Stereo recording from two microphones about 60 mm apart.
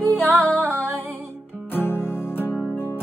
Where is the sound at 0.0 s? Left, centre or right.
Left.